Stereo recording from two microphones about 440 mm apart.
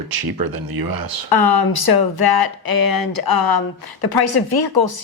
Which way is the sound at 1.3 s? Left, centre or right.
Left.